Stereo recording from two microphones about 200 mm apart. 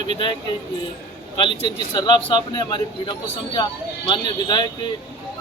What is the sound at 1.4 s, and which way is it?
A man's voice, 25° left (ahead or behind).